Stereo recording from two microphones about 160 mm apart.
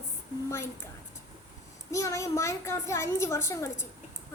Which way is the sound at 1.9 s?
20° left (ahead or behind).